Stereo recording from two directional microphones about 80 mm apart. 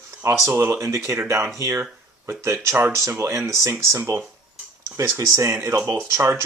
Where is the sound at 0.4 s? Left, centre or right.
Right.